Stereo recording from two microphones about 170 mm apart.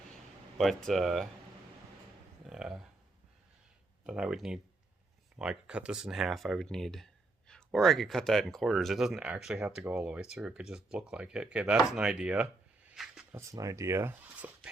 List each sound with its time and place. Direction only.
0.6 s speech: centre (ahead or behind)
2.5 s speech: 5° right (ahead or behind)
4.0 s speech: 5° right (ahead or behind)
12.9 s a sound: 5° right (ahead or behind)
13.3 s speech: 20° right (ahead or behind)